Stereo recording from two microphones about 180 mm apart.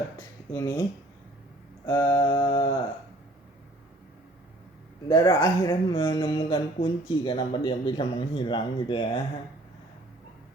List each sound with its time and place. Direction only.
0.5 s speech: 15° left (ahead or behind)
1.9 s speech: 20° left (ahead or behind)
5.0 s speech: 25° left (ahead or behind)